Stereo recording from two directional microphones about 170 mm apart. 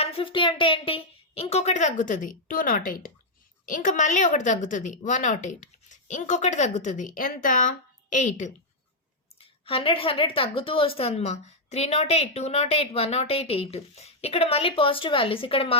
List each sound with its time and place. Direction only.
0.0 s a woman's voice: 30° left (ahead or behind)
9.4 s a woman's voice: 35° left (ahead or behind)